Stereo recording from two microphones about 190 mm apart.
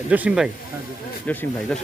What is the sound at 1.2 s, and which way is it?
Speech, 10° left (ahead or behind).